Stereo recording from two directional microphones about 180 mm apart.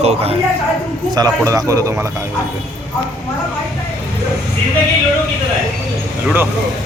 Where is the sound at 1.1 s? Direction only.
20° right (ahead or behind).